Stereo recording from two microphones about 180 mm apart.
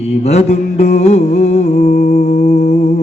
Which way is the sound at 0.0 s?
35° left (ahead or behind).